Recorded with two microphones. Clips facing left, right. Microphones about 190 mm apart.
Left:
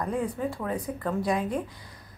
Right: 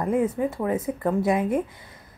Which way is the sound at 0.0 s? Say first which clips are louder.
Right 6 dB; 20° right (ahead or behind).